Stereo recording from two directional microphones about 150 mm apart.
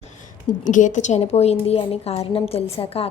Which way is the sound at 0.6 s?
60° left (ahead or behind).